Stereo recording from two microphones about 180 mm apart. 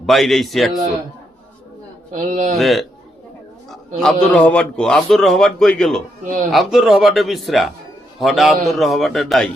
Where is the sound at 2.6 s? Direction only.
Centre (ahead or behind).